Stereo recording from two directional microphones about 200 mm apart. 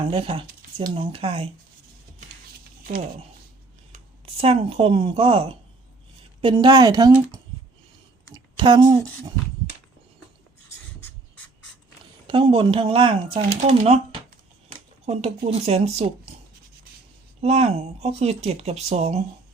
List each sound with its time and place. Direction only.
0.0 s speech: 25° right (ahead or behind)
3.9 s speech: 30° right (ahead or behind)
8.3 s a sound: 25° right (ahead or behind)
12.3 s speech: 25° right (ahead or behind)
15.0 s speech: 30° right (ahead or behind)
17.4 s speech: 30° right (ahead or behind)